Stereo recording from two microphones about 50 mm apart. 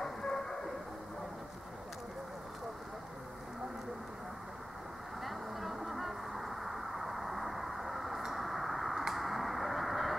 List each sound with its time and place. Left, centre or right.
0.0 s train: centre
5.2 s vehicle: centre